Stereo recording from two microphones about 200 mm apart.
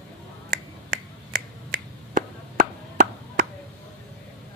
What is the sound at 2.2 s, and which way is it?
Chop, 40° right (ahead or behind).